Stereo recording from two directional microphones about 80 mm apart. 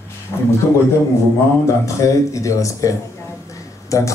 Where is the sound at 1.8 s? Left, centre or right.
Left.